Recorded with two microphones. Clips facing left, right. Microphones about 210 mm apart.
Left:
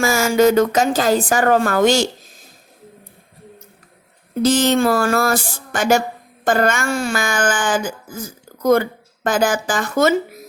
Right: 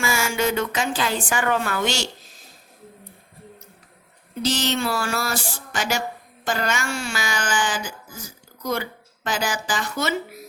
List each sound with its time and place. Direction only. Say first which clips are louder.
0.0 s speech: left 9 dB; 40° left (ahead or behind)
4.4 s speech: left 9 dB; 50° left (ahead or behind)